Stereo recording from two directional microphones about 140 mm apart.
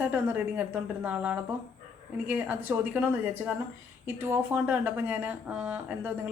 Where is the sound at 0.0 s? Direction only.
15° right (ahead or behind).